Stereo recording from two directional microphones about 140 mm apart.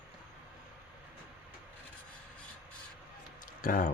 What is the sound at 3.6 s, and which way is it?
Speech, 80° left.